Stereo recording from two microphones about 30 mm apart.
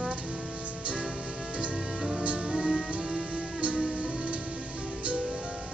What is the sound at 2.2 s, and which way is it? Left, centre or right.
Music, right.